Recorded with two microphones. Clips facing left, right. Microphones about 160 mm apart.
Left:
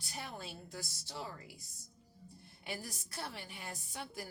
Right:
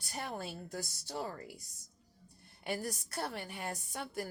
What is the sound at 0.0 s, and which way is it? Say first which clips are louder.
Speech: right 5 dB; 50° right (ahead or behind).